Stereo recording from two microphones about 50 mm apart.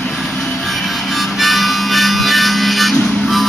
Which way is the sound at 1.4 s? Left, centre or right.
Centre.